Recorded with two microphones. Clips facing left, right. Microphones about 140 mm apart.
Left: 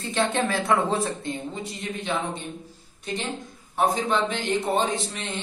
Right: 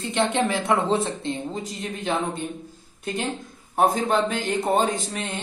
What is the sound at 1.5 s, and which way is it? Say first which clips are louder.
Speech: right 2 dB; 40° right (ahead or behind).